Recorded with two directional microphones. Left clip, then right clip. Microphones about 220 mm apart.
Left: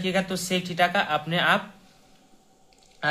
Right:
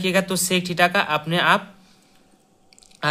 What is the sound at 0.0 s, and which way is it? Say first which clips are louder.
A man's voice: right 5 dB; 35° right (ahead or behind).